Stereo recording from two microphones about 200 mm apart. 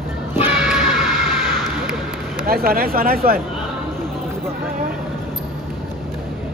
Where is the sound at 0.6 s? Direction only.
Centre (ahead or behind).